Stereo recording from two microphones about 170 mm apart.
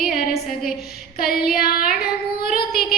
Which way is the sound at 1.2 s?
65° left (ahead or behind).